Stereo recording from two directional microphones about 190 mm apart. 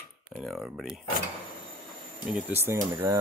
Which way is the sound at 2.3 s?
5° right (ahead or behind).